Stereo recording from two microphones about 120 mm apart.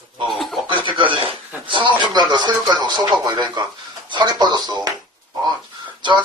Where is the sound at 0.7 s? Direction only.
45° right (ahead or behind).